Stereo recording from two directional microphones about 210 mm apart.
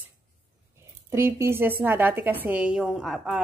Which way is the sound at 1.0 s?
10° right (ahead or behind).